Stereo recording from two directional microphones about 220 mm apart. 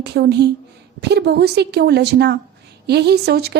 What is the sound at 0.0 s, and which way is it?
A woman's voice, 50° right (ahead or behind).